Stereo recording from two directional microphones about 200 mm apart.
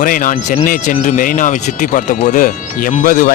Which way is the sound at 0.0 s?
40° left (ahead or behind).